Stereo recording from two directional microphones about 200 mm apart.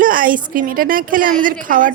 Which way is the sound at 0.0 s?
45° right (ahead or behind).